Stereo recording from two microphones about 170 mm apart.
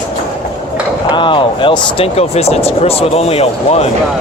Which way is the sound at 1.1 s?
30° left (ahead or behind).